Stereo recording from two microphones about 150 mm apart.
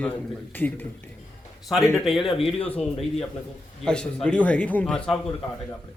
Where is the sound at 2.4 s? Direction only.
40° left (ahead or behind).